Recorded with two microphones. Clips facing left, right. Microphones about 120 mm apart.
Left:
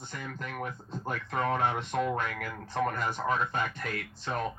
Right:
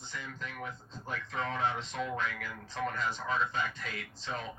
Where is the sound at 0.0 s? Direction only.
55° left (ahead or behind).